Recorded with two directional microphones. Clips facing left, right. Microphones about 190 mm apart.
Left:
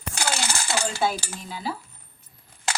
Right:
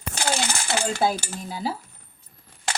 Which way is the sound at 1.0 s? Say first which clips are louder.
Right 2 dB; 35° right (ahead or behind).